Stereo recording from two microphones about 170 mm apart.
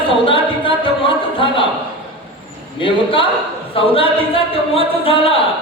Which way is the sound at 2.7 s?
30° left (ahead or behind).